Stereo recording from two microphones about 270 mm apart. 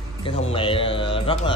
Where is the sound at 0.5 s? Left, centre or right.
Centre.